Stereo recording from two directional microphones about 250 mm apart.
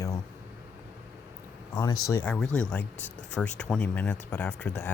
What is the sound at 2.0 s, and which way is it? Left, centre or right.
Speech, centre.